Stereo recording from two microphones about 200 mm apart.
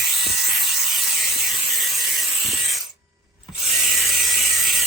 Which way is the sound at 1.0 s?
55° right (ahead or behind).